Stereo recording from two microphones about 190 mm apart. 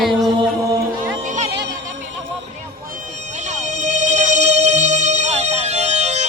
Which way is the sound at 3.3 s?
40° right (ahead or behind).